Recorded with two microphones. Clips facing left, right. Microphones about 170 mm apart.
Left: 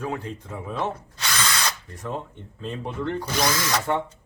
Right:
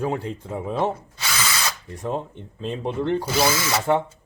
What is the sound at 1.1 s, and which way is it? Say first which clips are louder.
Drill: even; 5° right (ahead or behind).